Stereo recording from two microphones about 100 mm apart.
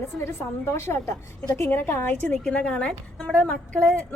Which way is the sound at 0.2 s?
25° left (ahead or behind).